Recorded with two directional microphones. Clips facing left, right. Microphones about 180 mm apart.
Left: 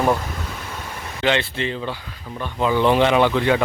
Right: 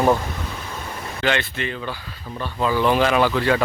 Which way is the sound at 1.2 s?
25° left (ahead or behind).